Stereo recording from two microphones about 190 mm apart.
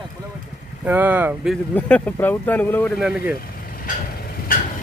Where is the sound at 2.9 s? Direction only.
5° right (ahead or behind).